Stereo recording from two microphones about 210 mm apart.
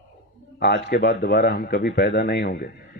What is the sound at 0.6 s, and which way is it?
A man's voice, 55° left (ahead or behind).